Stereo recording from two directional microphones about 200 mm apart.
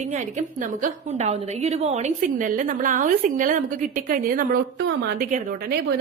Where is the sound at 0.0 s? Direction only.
35° right (ahead or behind).